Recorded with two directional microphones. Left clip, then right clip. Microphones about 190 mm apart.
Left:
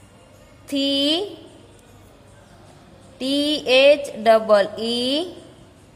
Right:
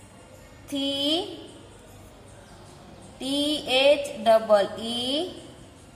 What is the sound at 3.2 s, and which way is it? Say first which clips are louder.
A woman's voice: left 5 dB; 55° left (ahead or behind).